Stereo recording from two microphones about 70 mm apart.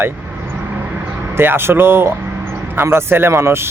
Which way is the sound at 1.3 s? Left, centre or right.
Right.